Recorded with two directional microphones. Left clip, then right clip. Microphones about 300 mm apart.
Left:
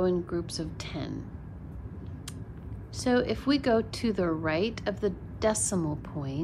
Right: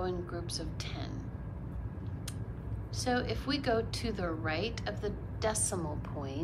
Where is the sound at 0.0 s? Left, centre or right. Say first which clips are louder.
Left 9 dB; left.